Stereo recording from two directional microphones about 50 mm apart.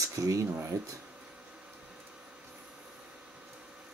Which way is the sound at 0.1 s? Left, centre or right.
Right.